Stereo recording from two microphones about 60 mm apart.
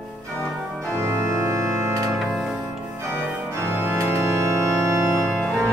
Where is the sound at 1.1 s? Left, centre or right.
Right.